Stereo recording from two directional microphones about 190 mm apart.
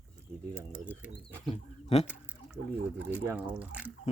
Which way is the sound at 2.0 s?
5° right (ahead or behind).